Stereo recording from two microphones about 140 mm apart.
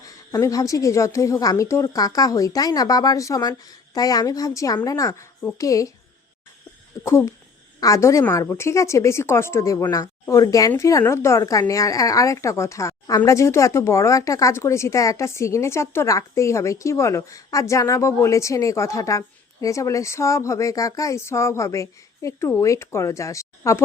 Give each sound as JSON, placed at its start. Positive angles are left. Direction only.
{"t": 0.0, "sound": "a woman's voice", "side_deg": 25}
{"t": 7.0, "sound": "a woman's voice", "side_deg": 20}